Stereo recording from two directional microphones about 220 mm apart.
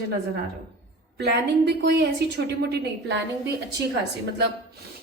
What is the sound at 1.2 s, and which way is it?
Speech, 50° right (ahead or behind).